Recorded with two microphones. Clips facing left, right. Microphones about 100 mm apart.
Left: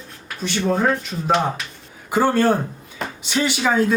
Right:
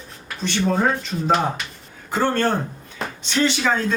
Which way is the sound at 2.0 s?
10° left (ahead or behind).